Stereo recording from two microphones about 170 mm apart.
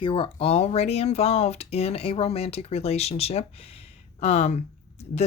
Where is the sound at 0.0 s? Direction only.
30° left (ahead or behind).